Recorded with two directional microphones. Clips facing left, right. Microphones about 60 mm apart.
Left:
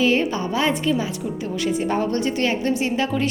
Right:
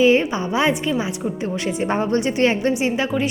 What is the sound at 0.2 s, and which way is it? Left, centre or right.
Speech, centre.